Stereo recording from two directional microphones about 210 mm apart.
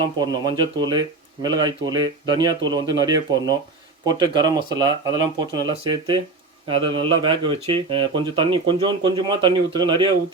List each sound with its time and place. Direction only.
0.0 s speech: 20° right (ahead or behind)